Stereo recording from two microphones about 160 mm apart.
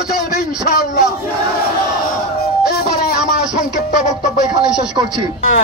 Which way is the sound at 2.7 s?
80° left.